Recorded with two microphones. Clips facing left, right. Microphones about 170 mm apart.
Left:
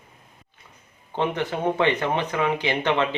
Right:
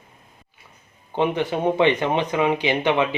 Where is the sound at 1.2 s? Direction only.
15° right (ahead or behind).